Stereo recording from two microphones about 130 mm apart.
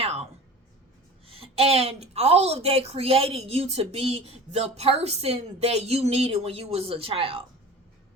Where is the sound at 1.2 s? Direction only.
45° right (ahead or behind).